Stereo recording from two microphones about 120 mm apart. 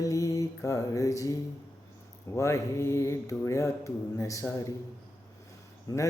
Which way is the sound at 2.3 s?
25° left (ahead or behind).